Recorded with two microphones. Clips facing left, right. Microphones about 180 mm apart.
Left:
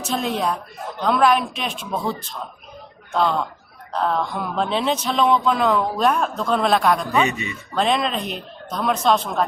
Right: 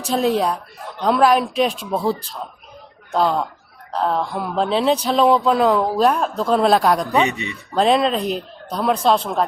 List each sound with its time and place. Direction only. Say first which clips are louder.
0.0 s a man's voice: right 5 dB; 35° right (ahead or behind)
7.1 s speech: right 2 dB; 20° right (ahead or behind)
7.8 s a man's voice: right 4 dB; 35° right (ahead or behind)